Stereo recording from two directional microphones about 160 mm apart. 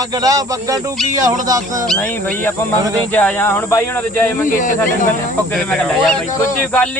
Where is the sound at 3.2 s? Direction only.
10° left (ahead or behind).